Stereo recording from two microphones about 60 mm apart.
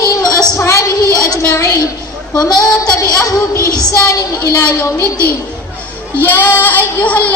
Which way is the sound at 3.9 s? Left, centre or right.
Left.